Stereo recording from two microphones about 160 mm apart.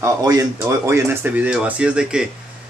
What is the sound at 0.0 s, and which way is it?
A man's voice, 20° right (ahead or behind).